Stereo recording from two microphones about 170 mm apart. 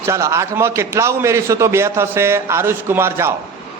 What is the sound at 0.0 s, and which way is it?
A man's voice, 15° right (ahead or behind).